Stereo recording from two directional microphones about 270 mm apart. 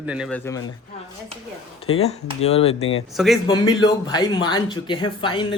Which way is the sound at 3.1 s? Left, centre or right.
Centre.